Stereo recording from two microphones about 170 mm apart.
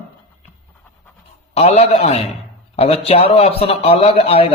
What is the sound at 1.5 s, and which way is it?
A man's voice, 40° left (ahead or behind).